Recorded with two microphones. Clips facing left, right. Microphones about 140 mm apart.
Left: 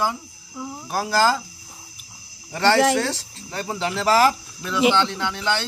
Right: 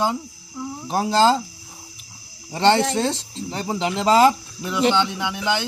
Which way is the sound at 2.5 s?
20° right (ahead or behind).